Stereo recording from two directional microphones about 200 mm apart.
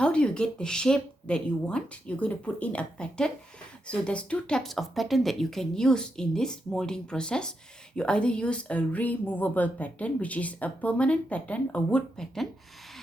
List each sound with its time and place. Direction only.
0.0 s speech: 5° left (ahead or behind)